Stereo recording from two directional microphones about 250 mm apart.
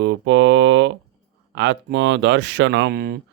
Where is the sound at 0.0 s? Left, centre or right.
Right.